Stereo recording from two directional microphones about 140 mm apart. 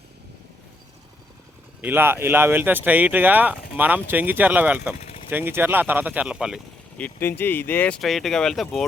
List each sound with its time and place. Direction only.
1.8 s speech: 15° right (ahead or behind)
4.9 s a sound: 45° left (ahead or behind)
5.3 s speech: 15° right (ahead or behind)
6.9 s speech: 15° left (ahead or behind)